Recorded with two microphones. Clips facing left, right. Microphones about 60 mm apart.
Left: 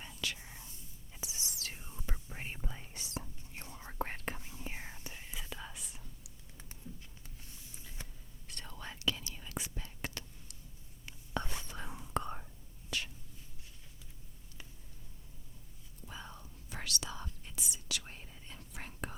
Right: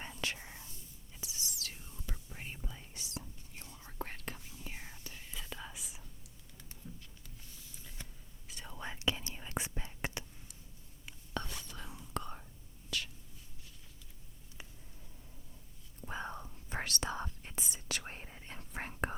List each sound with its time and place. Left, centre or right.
0.2 s whispering: right
0.4 s whispering: centre
1.1 s whispering: left
2.3 s whispering: left
5.5 s whispering: centre
8.4 s whispering: centre; by 10.2 s right
11.4 s whispering: left
12.9 s a sound: left
16.0 s whispering: right